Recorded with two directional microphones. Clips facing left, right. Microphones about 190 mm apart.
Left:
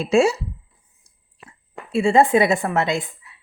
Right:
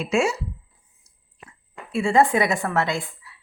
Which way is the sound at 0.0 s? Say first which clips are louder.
Left 5 dB; 35° left (ahead or behind).